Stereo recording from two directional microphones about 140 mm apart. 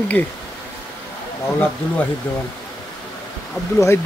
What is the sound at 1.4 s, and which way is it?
Speech, 15° left (ahead or behind).